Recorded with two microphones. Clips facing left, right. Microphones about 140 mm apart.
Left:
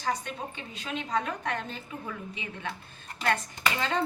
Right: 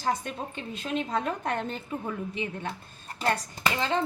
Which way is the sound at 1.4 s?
50° right (ahead or behind).